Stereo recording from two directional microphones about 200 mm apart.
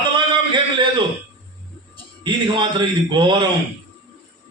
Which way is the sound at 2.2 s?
20° right (ahead or behind).